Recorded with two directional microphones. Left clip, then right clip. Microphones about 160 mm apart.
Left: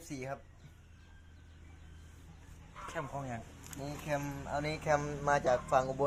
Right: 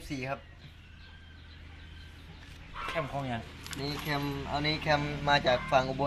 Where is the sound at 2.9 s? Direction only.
20° right (ahead or behind).